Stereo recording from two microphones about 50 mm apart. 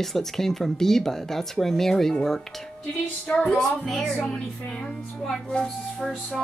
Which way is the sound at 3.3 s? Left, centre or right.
Centre.